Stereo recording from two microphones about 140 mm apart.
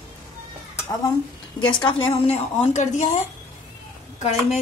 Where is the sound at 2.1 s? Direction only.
50° left (ahead or behind).